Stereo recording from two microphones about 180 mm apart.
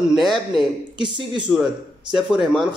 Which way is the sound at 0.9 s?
25° right (ahead or behind).